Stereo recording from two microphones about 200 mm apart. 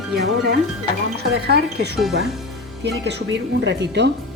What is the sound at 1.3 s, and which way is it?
Speech, 55° right (ahead or behind).